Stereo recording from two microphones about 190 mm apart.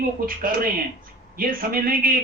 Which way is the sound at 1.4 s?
50° right (ahead or behind).